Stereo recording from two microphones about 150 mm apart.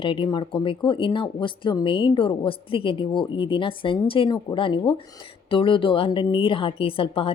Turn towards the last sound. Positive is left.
turn(degrees=35)  # may be behind; listen again after turning